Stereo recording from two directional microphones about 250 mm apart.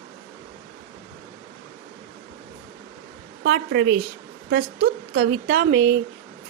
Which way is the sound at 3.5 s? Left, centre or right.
Right.